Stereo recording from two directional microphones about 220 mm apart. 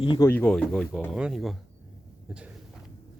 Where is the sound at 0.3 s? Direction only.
5° left (ahead or behind).